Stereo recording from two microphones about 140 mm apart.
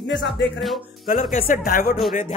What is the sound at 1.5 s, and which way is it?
Speech, 85° left.